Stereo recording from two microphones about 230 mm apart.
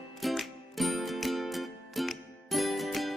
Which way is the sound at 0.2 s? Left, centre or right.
Centre.